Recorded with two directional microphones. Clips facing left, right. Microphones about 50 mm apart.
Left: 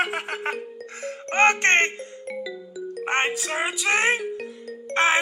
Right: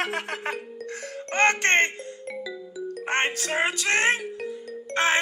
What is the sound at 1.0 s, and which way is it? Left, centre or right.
Music, left.